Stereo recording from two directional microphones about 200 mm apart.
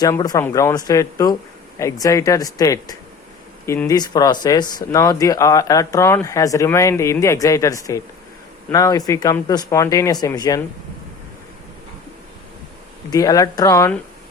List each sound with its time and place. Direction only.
0.0 s speech: 20° left (ahead or behind)
13.1 s speech: 20° left (ahead or behind)